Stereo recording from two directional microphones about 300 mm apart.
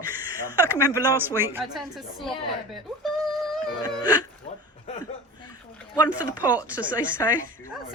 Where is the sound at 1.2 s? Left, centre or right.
Centre.